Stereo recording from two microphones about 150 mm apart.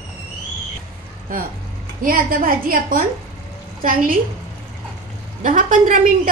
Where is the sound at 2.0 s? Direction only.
70° right (ahead or behind).